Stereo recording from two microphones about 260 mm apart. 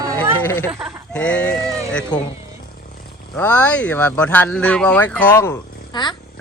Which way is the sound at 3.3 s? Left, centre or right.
Centre.